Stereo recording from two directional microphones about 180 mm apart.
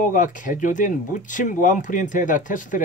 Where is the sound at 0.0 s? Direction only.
45° left (ahead or behind).